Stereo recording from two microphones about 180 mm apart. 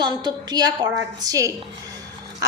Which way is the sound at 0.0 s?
25° right (ahead or behind).